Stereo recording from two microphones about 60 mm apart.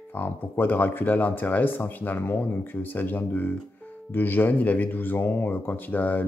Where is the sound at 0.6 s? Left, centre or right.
Left.